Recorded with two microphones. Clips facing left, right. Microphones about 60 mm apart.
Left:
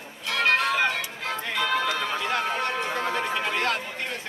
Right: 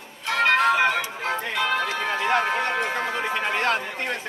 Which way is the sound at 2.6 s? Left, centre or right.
Right.